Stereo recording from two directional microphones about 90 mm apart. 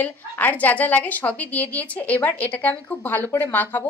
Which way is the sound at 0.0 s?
20° left (ahead or behind).